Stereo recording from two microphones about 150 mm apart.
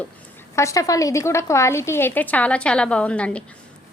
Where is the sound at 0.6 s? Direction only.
20° left (ahead or behind).